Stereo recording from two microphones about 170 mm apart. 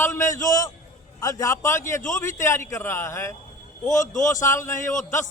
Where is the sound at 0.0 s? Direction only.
15° left (ahead or behind).